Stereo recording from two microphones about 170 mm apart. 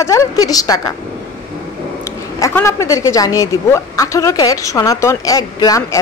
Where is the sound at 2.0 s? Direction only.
15° left (ahead or behind).